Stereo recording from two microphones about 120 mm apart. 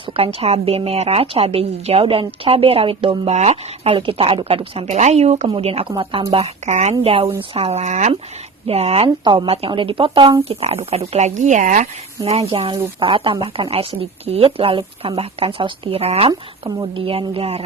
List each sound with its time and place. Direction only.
0.2 s speech: 55° right (ahead or behind)
3.3 s speech: 65° right (ahead or behind)
4.9 s speech: 70° right (ahead or behind); by 6.2 s 45° right (ahead or behind)
6.7 s speech: 75° right (ahead or behind)
7.0 s speech: 55° right (ahead or behind); by 8.1 s 75° right (ahead or behind)
8.6 s speech: 55° right (ahead or behind)
9.0 s speech: 40° right (ahead or behind); by 12.5 s 60° right (ahead or behind)
12.5 s speech: 45° right (ahead or behind)
16.6 s speech: 45° right (ahead or behind)